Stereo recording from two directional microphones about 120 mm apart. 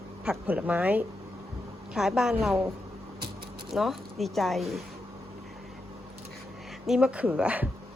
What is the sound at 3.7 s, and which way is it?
A woman's voice, centre (ahead or behind).